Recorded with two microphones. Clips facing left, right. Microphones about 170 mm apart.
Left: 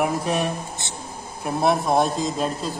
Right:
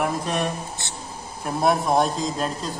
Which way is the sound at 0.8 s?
20° left (ahead or behind).